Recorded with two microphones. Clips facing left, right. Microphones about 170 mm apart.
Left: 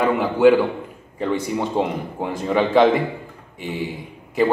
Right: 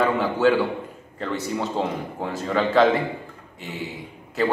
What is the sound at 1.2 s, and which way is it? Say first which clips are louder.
A man's voice: left 4 dB; 15° left (ahead or behind).